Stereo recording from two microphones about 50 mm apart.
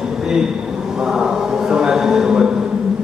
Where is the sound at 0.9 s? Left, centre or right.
Centre.